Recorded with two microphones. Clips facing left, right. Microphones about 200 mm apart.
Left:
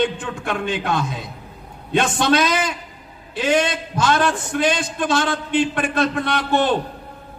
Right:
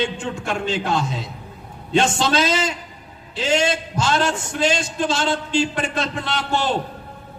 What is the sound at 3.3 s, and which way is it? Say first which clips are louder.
Speech: left 1 dB; 55° left (ahead or behind).